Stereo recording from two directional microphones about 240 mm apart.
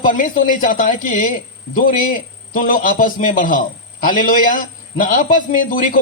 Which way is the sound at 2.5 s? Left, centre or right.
Left.